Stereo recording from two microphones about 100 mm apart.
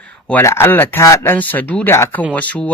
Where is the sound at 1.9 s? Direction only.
25° left (ahead or behind).